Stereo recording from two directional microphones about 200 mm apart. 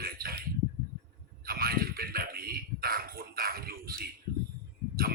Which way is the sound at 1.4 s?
50° right (ahead or behind).